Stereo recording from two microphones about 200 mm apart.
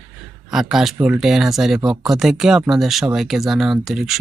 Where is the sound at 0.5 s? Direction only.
Centre (ahead or behind).